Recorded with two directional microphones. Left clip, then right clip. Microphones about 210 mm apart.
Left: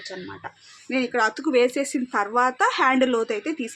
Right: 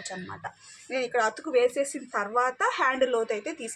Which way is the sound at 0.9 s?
45° left (ahead or behind).